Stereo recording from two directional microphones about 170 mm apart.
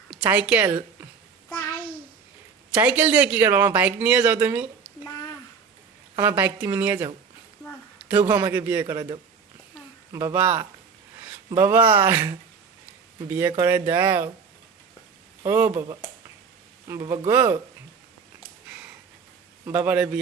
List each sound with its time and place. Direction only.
0.1 s a woman's voice: 5° right (ahead or behind)
2.7 s a man's voice: 10° right (ahead or behind)
6.2 s a man's voice: 10° right (ahead or behind)
10.1 s a man's voice: 15° right (ahead or behind)
13.6 s a man's voice: 15° right (ahead or behind)
15.4 s a man's voice: 10° right (ahead or behind)
16.9 s speech: 20° right (ahead or behind)
19.6 s a man's voice: 10° right (ahead or behind)